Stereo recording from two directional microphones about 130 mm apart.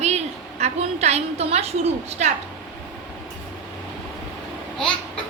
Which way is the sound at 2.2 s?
70° right (ahead or behind).